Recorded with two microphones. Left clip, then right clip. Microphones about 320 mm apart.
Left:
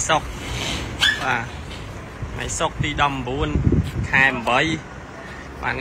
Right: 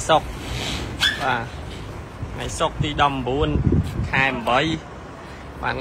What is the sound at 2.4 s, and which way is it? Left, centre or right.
Speech, centre.